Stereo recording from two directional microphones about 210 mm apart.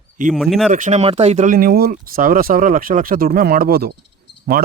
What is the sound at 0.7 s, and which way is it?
Speech, 35° right (ahead or behind).